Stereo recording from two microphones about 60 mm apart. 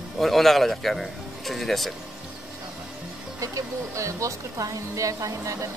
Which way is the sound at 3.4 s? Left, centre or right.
Right.